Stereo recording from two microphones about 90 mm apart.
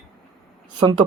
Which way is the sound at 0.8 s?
55° right (ahead or behind).